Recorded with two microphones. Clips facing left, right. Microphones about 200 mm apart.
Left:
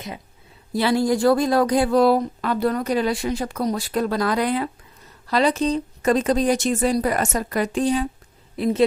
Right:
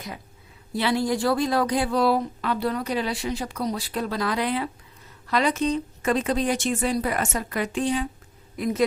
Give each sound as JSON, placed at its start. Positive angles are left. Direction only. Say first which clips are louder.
{"t": 0.7, "sound": "speech", "louder": "left 4 dB", "side_deg": 40}
{"t": 5.3, "sound": "speech", "louder": "left 3 dB", "side_deg": 35}
{"t": 8.5, "sound": "a woman's voice", "louder": "left 4 dB", "side_deg": 30}